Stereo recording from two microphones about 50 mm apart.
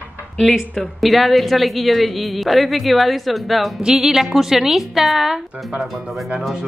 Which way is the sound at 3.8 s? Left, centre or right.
Centre.